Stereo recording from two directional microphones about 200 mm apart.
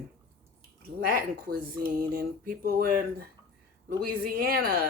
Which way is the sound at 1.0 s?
45° right (ahead or behind).